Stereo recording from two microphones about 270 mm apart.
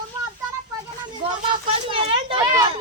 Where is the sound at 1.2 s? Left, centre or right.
Centre.